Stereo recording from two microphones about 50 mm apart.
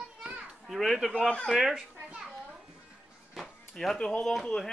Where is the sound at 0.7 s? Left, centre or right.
Centre.